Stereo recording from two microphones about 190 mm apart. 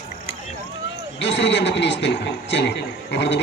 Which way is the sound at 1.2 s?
65° left (ahead or behind).